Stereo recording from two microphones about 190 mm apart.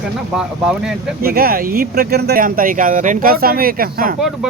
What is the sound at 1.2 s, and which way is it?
Speech, 50° right (ahead or behind).